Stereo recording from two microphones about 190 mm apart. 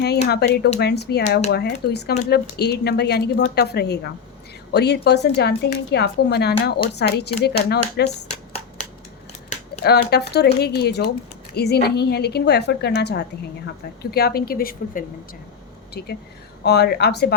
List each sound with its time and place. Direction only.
0.3 s speech: 60° left (ahead or behind)
9.8 s a woman's voice: 60° left (ahead or behind)